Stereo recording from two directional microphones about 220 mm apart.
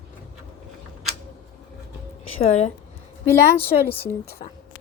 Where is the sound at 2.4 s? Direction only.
30° left (ahead or behind).